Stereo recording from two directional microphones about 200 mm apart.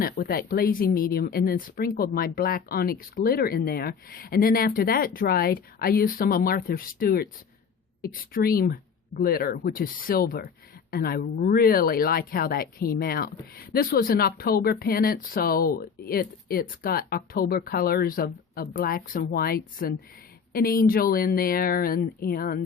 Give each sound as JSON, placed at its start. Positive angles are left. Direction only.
{"t": 0.0, "sound": "speech", "side_deg": 50}